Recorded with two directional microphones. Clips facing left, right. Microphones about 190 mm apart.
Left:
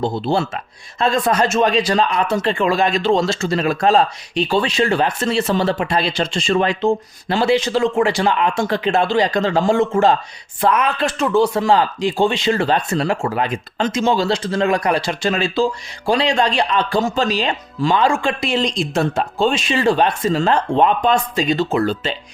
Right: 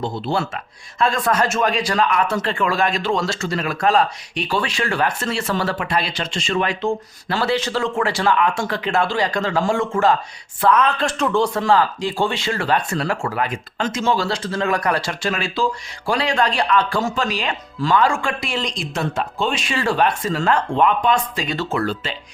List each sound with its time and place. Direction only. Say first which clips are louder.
0.0 s speech: left 4 dB; 30° left (ahead or behind)
10.6 s speech: even; 10° left (ahead or behind)
11.7 s speech: left 2 dB; 20° left (ahead or behind)
21.4 s speech: left 5 dB; 20° left (ahead or behind)